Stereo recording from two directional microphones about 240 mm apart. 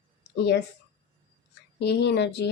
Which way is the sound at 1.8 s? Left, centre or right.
Left.